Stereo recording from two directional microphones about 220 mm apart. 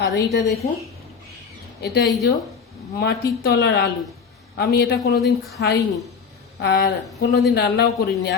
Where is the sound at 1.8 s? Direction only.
50° left (ahead or behind).